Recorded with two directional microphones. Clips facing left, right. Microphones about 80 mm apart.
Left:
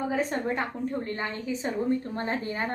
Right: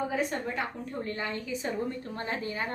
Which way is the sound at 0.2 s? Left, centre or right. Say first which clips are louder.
Left 3 dB; left.